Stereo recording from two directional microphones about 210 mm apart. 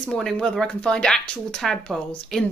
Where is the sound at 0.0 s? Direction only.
5° left (ahead or behind).